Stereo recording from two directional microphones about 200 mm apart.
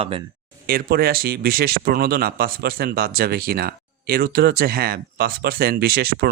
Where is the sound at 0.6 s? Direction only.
50° right (ahead or behind).